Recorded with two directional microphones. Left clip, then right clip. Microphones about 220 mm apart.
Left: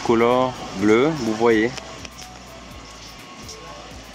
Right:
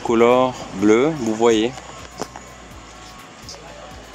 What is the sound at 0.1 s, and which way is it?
Speech, 5° right (ahead or behind).